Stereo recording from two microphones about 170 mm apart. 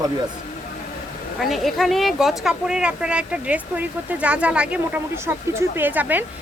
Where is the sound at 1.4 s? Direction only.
Centre (ahead or behind).